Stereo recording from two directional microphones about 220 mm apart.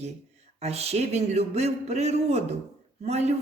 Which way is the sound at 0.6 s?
30° right (ahead or behind).